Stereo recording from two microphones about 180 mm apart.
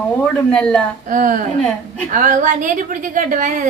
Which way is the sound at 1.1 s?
50° right (ahead or behind).